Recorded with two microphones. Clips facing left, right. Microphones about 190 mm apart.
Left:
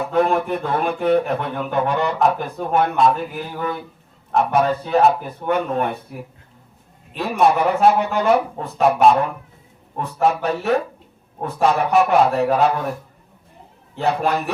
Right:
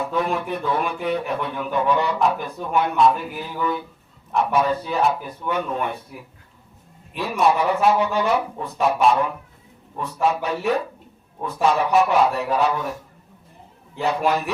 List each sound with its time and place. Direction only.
0.1 s speech: 55° left (ahead or behind)
7.2 s speech: 55° left (ahead or behind)
13.9 s speech: 55° left (ahead or behind)